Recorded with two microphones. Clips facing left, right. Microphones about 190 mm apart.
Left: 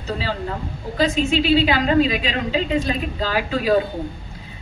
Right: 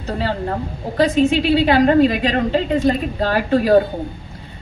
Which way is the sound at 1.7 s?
55° right (ahead or behind).